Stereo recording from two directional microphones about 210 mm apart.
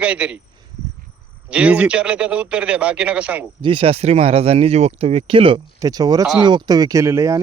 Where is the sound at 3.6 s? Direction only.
25° right (ahead or behind).